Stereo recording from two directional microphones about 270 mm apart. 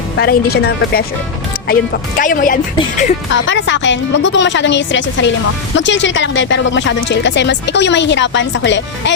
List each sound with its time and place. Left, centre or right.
0.2 s speech: left
3.3 s speech: left